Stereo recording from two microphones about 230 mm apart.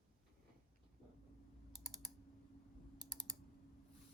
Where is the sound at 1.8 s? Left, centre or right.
Centre.